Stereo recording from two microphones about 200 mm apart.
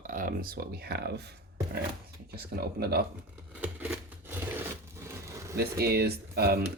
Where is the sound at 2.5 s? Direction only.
50° right (ahead or behind).